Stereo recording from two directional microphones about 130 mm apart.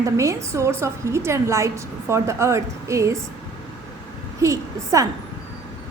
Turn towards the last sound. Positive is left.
turn(degrees=-25)  # may be behind; listen again after turning